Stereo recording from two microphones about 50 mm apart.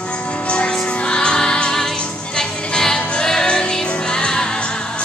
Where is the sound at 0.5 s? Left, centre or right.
Centre.